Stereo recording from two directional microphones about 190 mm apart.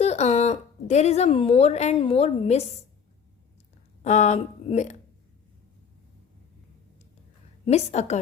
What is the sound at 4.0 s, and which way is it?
Speech, 35° left (ahead or behind).